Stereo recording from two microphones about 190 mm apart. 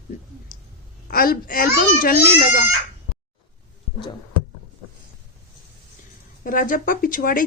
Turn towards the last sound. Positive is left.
turn(degrees=45)  # may be behind; listen again after turning